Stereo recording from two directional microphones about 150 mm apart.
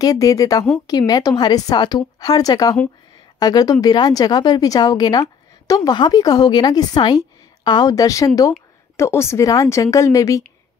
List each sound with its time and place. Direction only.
0.0 s a woman's voice: 25° left (ahead or behind)